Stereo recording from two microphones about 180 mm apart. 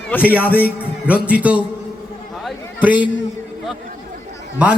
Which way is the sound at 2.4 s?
10° right (ahead or behind).